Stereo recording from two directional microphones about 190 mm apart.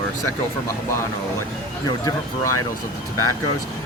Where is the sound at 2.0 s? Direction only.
15° left (ahead or behind).